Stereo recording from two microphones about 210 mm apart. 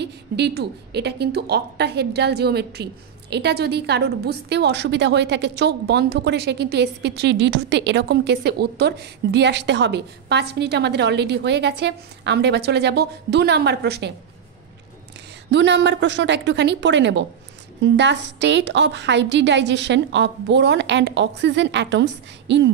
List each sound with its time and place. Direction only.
0.0 s a woman's voice: 50° right (ahead or behind)
15.5 s a woman's voice: 55° right (ahead or behind)